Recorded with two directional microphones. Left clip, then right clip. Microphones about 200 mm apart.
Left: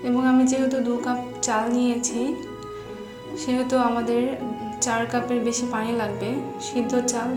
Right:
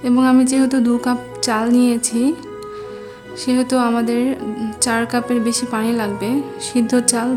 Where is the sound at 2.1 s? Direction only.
65° right (ahead or behind).